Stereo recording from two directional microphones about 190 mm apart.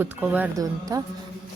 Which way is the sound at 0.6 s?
20° right (ahead or behind).